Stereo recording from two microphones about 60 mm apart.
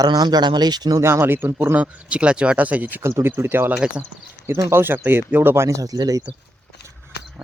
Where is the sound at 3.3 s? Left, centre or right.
Right.